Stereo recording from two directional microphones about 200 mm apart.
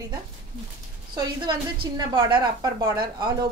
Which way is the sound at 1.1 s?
20° right (ahead or behind).